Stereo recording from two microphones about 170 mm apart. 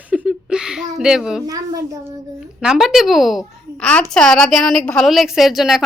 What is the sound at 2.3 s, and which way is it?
A child's voice, 5° right (ahead or behind).